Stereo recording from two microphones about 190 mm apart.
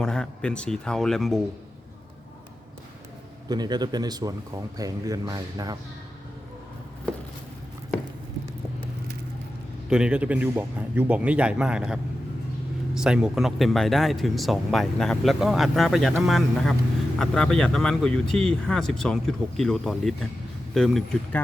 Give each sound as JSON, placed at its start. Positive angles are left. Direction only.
{"t": 0.0, "sound": "speech", "side_deg": 5}
{"t": 3.5, "sound": "speech", "side_deg": -20}
{"t": 9.9, "sound": "speech", "side_deg": -5}